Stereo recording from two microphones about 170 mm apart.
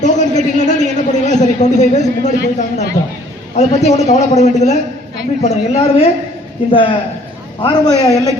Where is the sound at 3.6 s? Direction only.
40° left (ahead or behind).